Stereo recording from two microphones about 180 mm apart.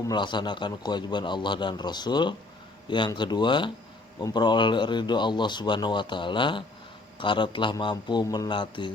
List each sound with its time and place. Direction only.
0.1 s a man's voice: 25° left (ahead or behind)